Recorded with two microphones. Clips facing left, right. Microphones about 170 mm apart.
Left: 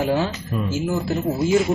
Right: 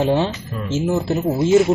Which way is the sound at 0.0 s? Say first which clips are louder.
Right 3 dB; 25° right (ahead or behind).